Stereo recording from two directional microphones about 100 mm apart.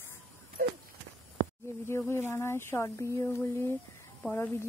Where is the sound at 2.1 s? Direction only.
25° left (ahead or behind).